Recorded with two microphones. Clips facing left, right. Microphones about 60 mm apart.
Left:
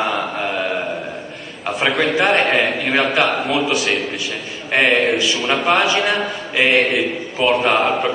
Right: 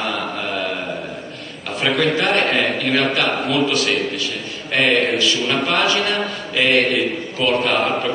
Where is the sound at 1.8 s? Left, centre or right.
Centre.